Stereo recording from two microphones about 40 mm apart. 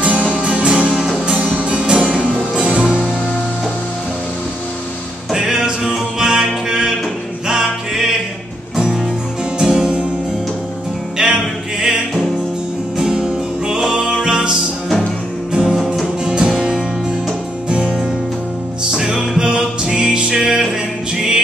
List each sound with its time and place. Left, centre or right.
0.0 s music: right
5.3 s music: centre
8.7 s music: centre
11.2 s music: right
15.5 s music: centre
17.6 s music: right
18.9 s music: centre